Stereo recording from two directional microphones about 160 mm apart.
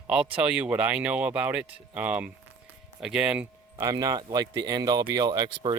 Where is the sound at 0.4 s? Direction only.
10° right (ahead or behind).